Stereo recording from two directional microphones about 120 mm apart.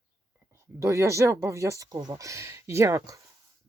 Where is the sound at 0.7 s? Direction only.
25° right (ahead or behind).